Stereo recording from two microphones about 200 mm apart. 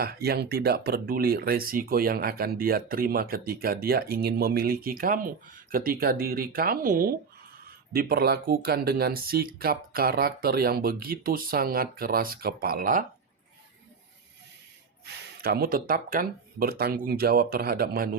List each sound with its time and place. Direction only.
0.0 s speech: 50° right (ahead or behind)
15.0 s speech: 50° right (ahead or behind)